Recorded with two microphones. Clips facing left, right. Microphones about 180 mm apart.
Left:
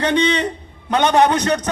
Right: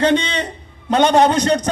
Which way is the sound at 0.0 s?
25° right (ahead or behind).